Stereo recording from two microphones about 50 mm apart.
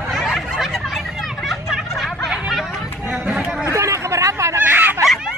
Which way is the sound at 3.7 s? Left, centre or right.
Right.